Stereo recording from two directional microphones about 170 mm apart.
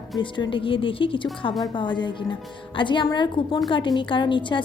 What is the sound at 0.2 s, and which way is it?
A woman's voice, 30° left (ahead or behind).